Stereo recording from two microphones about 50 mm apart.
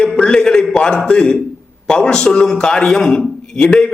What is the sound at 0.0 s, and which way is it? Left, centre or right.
Music, centre.